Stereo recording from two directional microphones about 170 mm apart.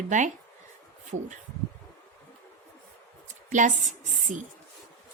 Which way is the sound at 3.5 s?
45° right (ahead or behind).